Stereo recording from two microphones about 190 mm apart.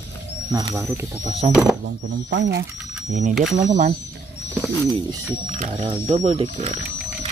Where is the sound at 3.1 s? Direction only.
40° right (ahead or behind).